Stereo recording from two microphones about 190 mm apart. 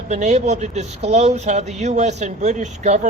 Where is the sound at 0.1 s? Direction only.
35° right (ahead or behind).